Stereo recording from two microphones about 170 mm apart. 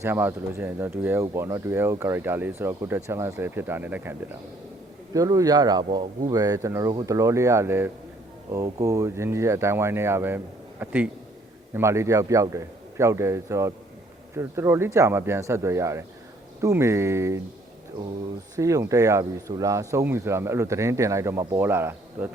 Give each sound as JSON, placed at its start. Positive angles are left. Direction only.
{"t": 0.0, "sound": "speech", "side_deg": -15}
{"t": 5.1, "sound": "speech", "side_deg": -20}
{"t": 18.5, "sound": "speech", "side_deg": -20}